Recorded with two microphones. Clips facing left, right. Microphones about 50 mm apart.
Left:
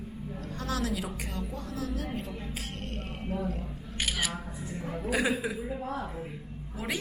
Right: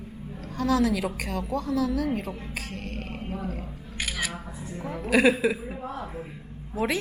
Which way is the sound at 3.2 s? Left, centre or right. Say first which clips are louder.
Left 2 dB; right.